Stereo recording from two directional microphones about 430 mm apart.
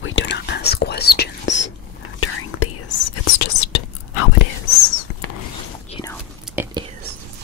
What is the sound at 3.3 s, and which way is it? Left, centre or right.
Whispering, left.